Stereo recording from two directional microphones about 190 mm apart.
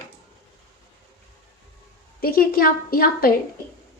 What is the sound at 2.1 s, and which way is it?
A woman's voice, 50° left (ahead or behind).